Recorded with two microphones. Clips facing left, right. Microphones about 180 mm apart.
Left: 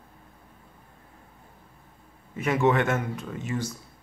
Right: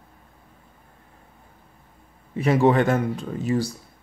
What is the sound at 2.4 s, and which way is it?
Speech, 35° right (ahead or behind).